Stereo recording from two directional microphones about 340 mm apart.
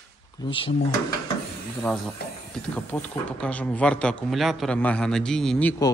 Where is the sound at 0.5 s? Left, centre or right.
Centre.